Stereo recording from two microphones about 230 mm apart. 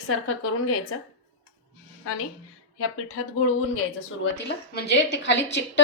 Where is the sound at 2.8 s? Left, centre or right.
Left.